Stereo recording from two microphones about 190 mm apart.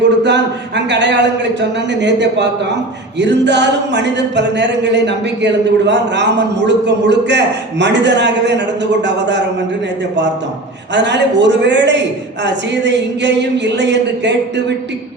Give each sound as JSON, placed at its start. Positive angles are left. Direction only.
{"t": 0.2, "sound": "a man's voice", "side_deg": -65}
{"t": 10.9, "sound": "a man's voice", "side_deg": -65}